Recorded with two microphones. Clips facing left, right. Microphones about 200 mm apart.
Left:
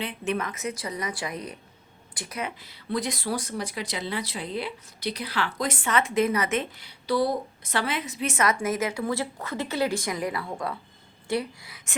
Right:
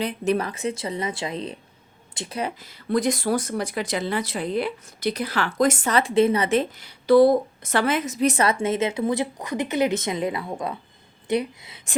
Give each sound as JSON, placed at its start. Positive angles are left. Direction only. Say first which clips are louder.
{"t": 0.0, "sound": "speech", "louder": "right 6 dB", "side_deg": -40}
{"t": 2.6, "sound": "speech", "louder": "right 8 dB", "side_deg": -45}